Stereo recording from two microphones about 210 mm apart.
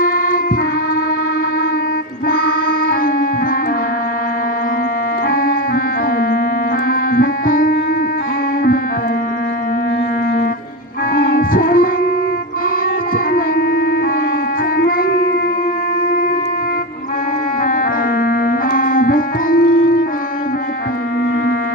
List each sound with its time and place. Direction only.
0.0 s music: 40° left (ahead or behind)
2.3 s music: 45° left (ahead or behind)
5.3 s music: 45° left (ahead or behind)
7.1 s music: 40° left (ahead or behind)
11.1 s music: 45° left (ahead or behind)
13.3 s a sound: 45° left (ahead or behind)
14.8 s music: 45° left (ahead or behind)
18.2 s music: 45° left (ahead or behind)